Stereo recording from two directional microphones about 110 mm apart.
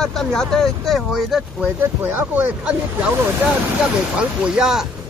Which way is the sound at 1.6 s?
20° right (ahead or behind).